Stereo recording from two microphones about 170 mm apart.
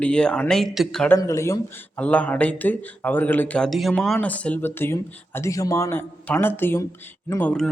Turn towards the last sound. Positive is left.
turn(degrees=5)  # may be behind; listen again after turning